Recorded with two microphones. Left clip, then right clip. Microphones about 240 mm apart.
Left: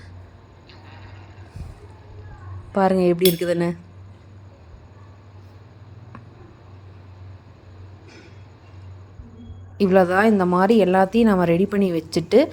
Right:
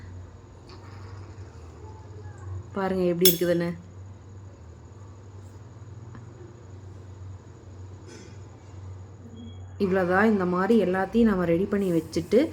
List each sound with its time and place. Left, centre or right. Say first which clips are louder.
2.7 s a woman's voice: left 8 dB; left
9.7 s a woman's voice: left 7 dB; left